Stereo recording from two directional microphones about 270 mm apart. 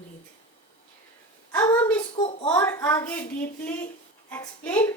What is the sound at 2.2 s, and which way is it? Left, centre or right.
Speech, left.